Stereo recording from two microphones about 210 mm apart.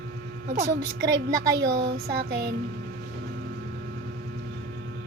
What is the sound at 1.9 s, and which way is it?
Music, 45° right (ahead or behind).